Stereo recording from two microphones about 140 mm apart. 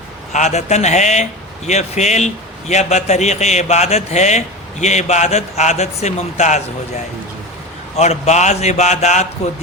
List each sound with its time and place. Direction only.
0.3 s a man's voice: 55° left (ahead or behind)